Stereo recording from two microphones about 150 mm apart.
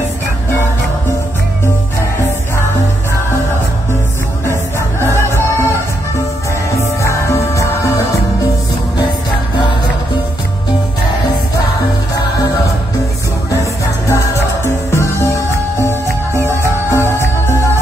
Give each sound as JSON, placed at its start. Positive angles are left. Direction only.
{"t": 5.1, "sound": "music", "side_deg": 15}
{"t": 6.8, "sound": "music", "side_deg": 20}
{"t": 13.5, "sound": "music", "side_deg": 20}